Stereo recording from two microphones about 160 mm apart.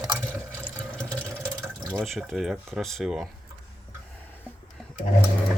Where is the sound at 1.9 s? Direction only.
Centre (ahead or behind).